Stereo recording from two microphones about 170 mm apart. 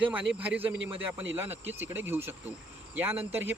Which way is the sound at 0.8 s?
90° right.